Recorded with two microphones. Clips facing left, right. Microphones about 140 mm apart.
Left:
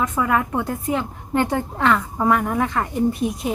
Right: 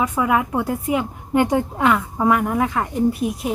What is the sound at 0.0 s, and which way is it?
A woman's voice, 10° right (ahead or behind).